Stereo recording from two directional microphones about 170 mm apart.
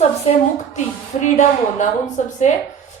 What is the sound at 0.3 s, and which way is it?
A woman's voice, 40° left (ahead or behind).